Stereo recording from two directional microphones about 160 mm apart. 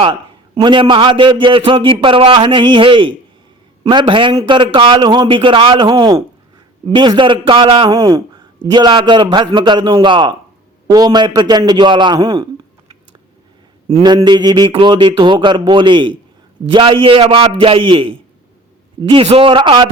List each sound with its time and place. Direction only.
0.0 s a man's voice: 30° right (ahead or behind)
7.9 s a man's voice: 20° right (ahead or behind)
14.3 s a man's voice: 25° right (ahead or behind)